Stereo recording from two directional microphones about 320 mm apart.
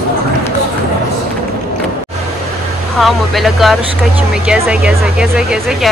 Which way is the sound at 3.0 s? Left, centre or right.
Centre.